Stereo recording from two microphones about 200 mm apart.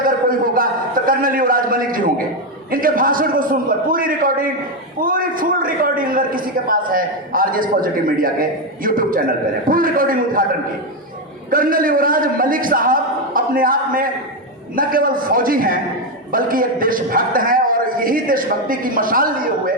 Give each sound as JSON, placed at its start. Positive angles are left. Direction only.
{"t": 0.0, "sound": "a sound", "side_deg": -45}
{"t": 2.6, "sound": "a man's voice", "side_deg": -45}
{"t": 11.5, "sound": "a man's voice", "side_deg": -45}